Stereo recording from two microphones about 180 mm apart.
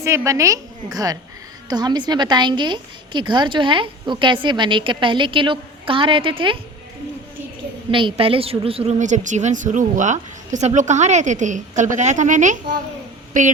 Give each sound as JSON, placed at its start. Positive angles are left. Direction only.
{"t": 0.0, "sound": "a woman's voice", "side_deg": -15}
{"t": 7.9, "sound": "a woman's voice", "side_deg": -30}